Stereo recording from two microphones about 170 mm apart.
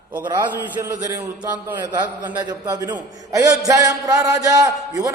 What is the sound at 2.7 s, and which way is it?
A man's voice, 20° right (ahead or behind).